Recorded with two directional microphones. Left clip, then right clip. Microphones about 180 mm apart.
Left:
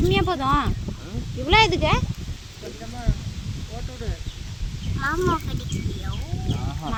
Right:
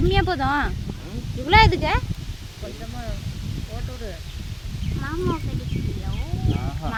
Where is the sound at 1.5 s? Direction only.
5° right (ahead or behind).